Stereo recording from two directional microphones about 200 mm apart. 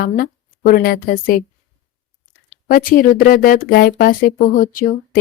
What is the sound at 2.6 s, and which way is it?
Speech, 45° left (ahead or behind).